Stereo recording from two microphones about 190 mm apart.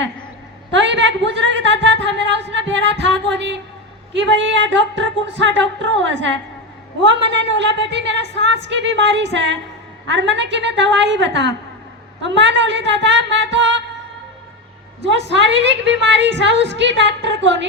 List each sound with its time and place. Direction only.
0.7 s a sound: 70° right (ahead or behind)
4.1 s a woman's voice: 70° right (ahead or behind)
15.0 s a woman's voice: 70° right (ahead or behind)